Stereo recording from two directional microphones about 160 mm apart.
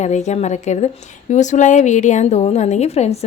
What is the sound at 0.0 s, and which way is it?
A woman's voice, 45° left (ahead or behind).